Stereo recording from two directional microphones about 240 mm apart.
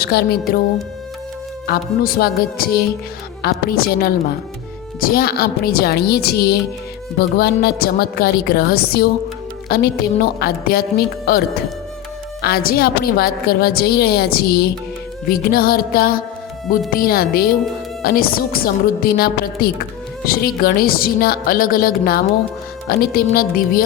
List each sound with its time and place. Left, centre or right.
0.0 s a woman's voice: left
1.6 s a woman's voice: left